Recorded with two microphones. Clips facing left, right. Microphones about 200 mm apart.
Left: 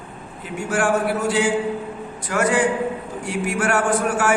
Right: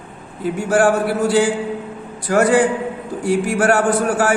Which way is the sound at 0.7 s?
35° right (ahead or behind).